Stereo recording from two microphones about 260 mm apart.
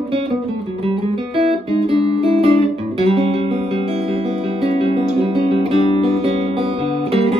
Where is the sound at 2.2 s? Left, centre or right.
Right.